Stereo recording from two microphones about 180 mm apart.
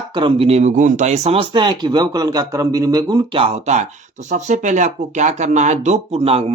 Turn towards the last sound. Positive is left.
turn(degrees=-35)  # may be behind; listen again after turning